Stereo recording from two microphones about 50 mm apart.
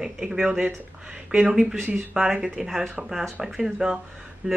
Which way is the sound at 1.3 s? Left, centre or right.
Centre.